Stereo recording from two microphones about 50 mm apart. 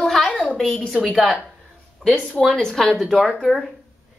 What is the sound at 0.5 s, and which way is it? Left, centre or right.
Speech, centre.